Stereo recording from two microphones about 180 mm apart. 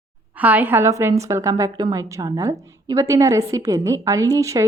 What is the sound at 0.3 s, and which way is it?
A woman's voice, 10° right (ahead or behind).